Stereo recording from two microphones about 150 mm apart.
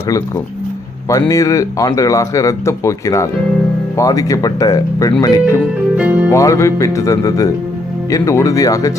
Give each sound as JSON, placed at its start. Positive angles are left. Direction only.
{"t": 1.3, "sound": "speech", "side_deg": 20}
{"t": 6.0, "sound": "speech", "side_deg": -10}
{"t": 6.3, "sound": "speech", "side_deg": 20}